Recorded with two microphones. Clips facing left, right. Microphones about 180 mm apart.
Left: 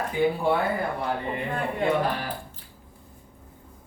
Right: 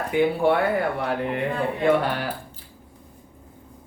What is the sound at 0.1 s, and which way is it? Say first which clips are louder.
Speech: right 4 dB; 70° right (ahead or behind).